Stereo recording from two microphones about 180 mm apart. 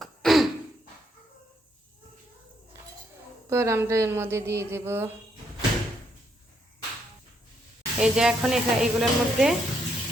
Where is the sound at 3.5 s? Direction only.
15° right (ahead or behind).